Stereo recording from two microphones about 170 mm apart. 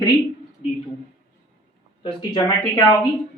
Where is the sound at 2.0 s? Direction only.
25° left (ahead or behind).